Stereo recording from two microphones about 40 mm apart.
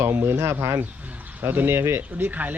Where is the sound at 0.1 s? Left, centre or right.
Right.